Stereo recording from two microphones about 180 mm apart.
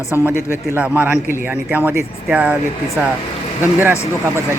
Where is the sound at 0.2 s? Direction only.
15° right (ahead or behind).